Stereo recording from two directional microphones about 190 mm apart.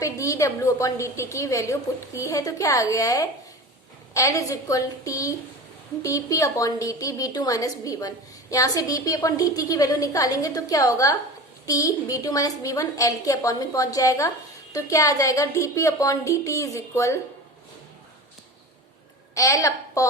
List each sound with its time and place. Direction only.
0.0 s a woman's voice: 15° left (ahead or behind)
19.3 s a woman's voice: 15° left (ahead or behind)